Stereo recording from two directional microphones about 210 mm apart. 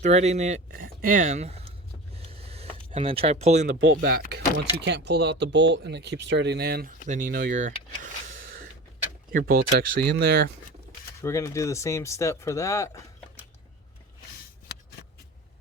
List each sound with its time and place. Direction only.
0.0 s speech: 30° right (ahead or behind)
2.1 s a sound: 30° right (ahead or behind)
4.0 s speech: 50° right (ahead or behind)
7.1 s speech: 40° right (ahead or behind)
9.3 s speech: 45° right (ahead or behind)
11.2 s speech: 15° left (ahead or behind)